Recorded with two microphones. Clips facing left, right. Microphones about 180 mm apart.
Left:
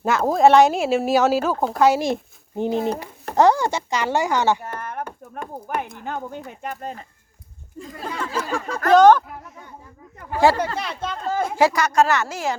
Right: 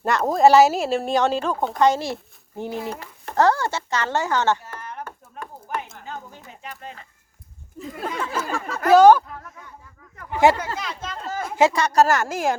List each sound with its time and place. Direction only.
0.0 s speech: centre (ahead or behind)
2.6 s speech: 20° left (ahead or behind)
4.6 s a sound: 55° left (ahead or behind)
6.0 s speech: 60° left (ahead or behind); by 7.0 s 40° left (ahead or behind)
7.8 s speech: 5° right (ahead or behind)
10.3 s speech: 20° right (ahead or behind)
10.8 s speech: 30° left (ahead or behind)
11.5 s speech: 25° right (ahead or behind); by 12.5 s 50° right (ahead or behind)